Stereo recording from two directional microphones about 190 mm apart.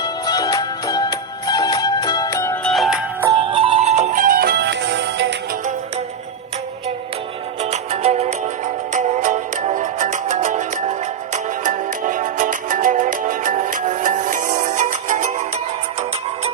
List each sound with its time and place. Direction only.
0.0 s music: 20° left (ahead or behind)
2.7 s music: centre (ahead or behind)
3.2 s music: 25° right (ahead or behind); by 5.3 s 65° right (ahead or behind)
7.6 s music: 35° right (ahead or behind)